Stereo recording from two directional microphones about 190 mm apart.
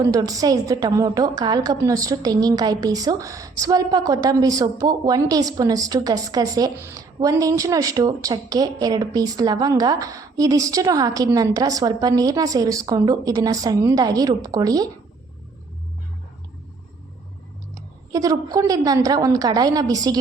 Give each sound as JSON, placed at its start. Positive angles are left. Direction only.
{"t": 0.0, "sound": "a woman's voice", "side_deg": -20}
{"t": 17.7, "sound": "a woman's voice", "side_deg": -20}